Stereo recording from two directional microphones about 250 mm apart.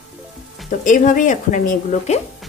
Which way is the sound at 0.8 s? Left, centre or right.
Left.